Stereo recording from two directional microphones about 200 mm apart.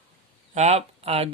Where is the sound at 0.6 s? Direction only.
35° right (ahead or behind).